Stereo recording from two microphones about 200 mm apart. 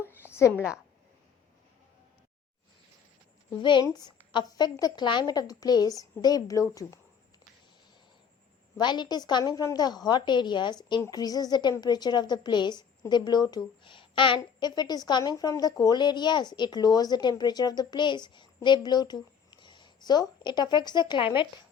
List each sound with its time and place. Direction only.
0.1 s a sound: 10° left (ahead or behind)
3.5 s a woman's voice: 25° left (ahead or behind)
8.8 s a woman's voice: 20° left (ahead or behind)